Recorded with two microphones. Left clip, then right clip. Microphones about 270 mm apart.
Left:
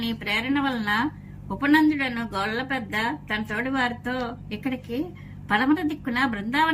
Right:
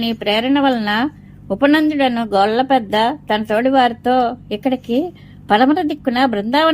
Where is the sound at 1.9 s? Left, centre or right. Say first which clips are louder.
Right 11 dB; right.